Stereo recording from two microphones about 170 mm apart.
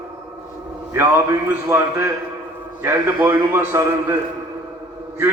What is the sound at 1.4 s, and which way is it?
A man's voice, 15° right (ahead or behind).